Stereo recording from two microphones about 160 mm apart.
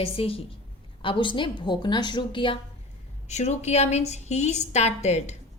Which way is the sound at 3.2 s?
45° left (ahead or behind).